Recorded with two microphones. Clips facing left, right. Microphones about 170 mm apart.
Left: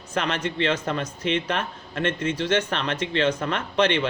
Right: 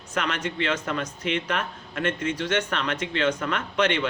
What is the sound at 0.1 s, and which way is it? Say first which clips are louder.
A man's voice: left 2 dB; 30° left (ahead or behind).